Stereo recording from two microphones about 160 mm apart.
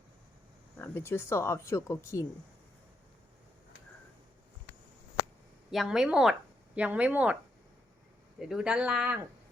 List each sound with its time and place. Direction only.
0.8 s speech: 15° left (ahead or behind)
5.7 s speech: centre (ahead or behind)
8.4 s speech: 5° right (ahead or behind)